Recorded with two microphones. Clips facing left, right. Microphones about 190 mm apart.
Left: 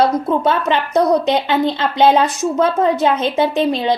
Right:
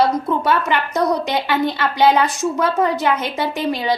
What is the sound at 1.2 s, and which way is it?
A woman's voice, 20° left (ahead or behind).